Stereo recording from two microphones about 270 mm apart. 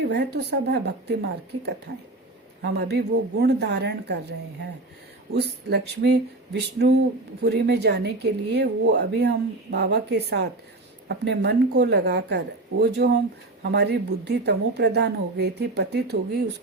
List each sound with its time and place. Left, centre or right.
0.0 s a woman's voice: right
5.3 s a woman's voice: right